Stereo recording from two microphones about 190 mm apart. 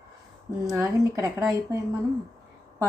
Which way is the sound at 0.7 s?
15° right (ahead or behind).